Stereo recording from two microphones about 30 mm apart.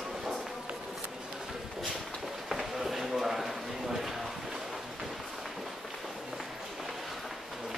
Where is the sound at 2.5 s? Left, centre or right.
Centre.